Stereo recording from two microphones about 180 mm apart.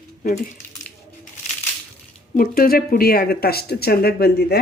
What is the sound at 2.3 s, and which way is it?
Speech, 50° left (ahead or behind).